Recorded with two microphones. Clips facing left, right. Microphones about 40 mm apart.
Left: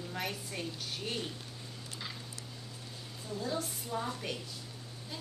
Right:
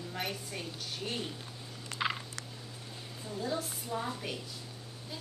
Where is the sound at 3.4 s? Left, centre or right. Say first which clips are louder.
Right 2 dB; centre.